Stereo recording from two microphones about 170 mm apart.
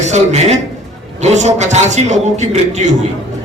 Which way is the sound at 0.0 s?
45° right (ahead or behind).